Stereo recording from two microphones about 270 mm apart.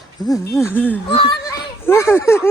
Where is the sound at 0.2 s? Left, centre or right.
Centre.